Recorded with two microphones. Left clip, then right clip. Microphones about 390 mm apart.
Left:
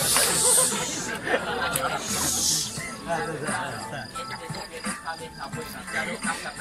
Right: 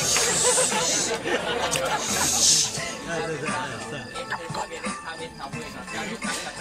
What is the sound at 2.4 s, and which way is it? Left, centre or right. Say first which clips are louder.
Music: right 8 dB; right.